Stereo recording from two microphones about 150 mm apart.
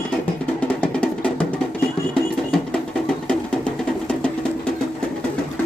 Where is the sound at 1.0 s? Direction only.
5° left (ahead or behind).